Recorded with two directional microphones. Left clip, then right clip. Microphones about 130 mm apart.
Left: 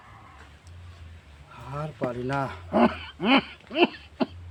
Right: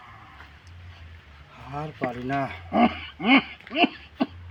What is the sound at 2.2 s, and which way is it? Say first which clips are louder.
Speech: right 1 dB; 40° left (ahead or behind).